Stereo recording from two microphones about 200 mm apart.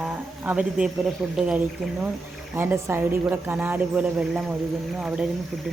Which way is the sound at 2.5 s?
10° right (ahead or behind).